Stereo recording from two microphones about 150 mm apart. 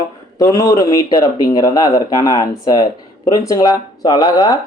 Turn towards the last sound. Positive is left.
turn(degrees=25)  # may be behind; listen again after turning